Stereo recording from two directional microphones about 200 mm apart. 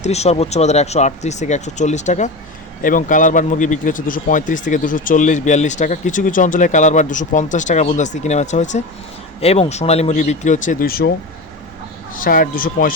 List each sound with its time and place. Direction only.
0.0 s a man's voice: 35° left (ahead or behind); by 11.1 s 50° left (ahead or behind)
12.1 s speech: 45° left (ahead or behind)